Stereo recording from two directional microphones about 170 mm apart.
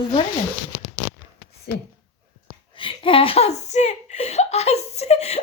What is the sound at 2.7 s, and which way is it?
Speech, 30° left (ahead or behind).